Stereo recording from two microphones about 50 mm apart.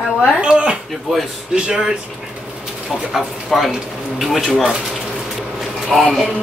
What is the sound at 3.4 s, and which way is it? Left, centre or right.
Speech, centre.